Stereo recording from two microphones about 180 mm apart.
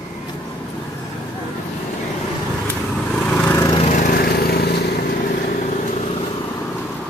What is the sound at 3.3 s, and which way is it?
Lawn mower, 15° left (ahead or behind).